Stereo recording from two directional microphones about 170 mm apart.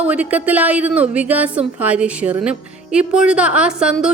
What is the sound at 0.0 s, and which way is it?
Speech, 10° right (ahead or behind).